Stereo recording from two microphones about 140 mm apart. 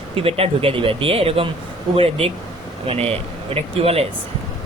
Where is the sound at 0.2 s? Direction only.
45° right (ahead or behind).